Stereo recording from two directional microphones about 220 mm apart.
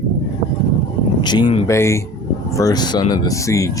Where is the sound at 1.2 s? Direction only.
20° left (ahead or behind).